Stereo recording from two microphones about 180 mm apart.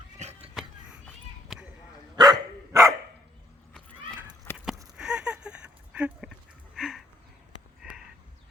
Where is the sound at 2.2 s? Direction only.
20° right (ahead or behind).